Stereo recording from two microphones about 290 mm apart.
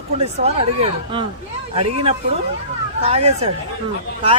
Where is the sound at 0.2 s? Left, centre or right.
Right.